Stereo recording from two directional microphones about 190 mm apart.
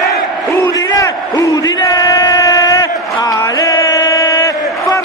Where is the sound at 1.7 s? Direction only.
20° left (ahead or behind).